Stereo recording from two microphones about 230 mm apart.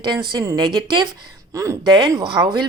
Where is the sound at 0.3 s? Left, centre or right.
Centre.